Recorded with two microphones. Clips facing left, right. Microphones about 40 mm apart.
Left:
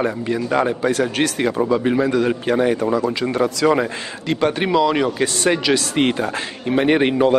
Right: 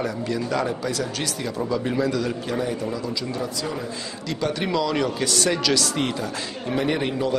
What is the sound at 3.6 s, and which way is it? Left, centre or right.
Speech, left.